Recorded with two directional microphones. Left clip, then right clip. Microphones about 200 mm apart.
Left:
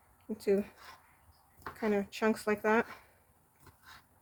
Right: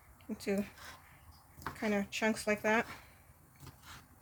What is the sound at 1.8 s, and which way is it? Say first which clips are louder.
Speech: left 2 dB; 50° left (ahead or behind).